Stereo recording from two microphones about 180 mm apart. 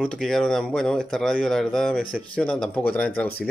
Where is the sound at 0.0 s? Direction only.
Centre (ahead or behind).